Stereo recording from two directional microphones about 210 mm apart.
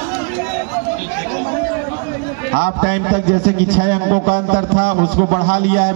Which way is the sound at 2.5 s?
45° right (ahead or behind).